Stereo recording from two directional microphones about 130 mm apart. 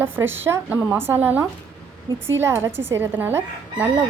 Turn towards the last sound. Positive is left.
turn(degrees=-15)  # may be behind; listen again after turning